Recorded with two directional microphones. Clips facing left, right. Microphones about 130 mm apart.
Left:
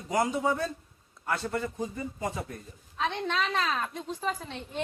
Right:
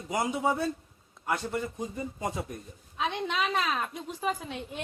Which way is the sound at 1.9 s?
20° right (ahead or behind).